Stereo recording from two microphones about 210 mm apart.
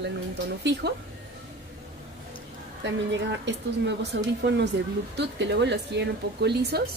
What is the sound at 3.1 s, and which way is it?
A woman's voice, 55° right (ahead or behind).